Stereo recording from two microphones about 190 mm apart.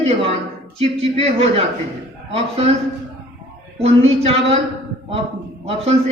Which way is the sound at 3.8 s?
35° right (ahead or behind).